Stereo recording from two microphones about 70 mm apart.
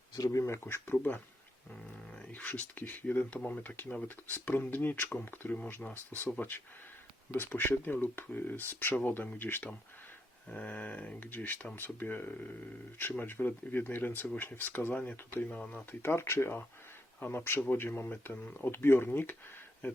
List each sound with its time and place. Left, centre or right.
0.3 s speech: left
0.9 s speech: left
7.3 s speech: left
16.0 s speech: left